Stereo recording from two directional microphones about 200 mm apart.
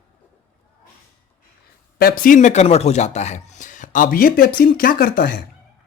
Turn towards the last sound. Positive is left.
turn(degrees=50)  # may be behind; listen again after turning